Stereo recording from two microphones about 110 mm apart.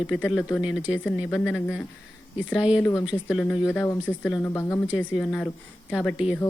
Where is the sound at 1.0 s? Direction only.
10° left (ahead or behind).